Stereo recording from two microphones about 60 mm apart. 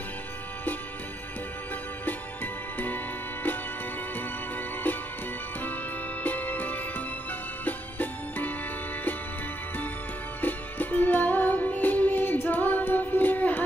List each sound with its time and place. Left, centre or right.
2.0 s music: left
4.9 s music: left
6.2 s music: left
10.4 s music: left